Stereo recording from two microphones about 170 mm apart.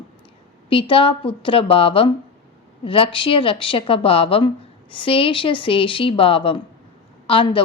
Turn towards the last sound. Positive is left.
turn(degrees=30)  # may be behind; listen again after turning